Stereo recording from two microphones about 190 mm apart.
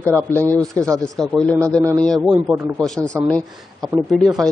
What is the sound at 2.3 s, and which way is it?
Speech, 10° right (ahead or behind).